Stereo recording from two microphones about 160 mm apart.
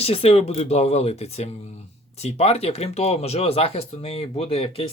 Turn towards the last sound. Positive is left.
turn(degrees=35)  # may be behind; listen again after turning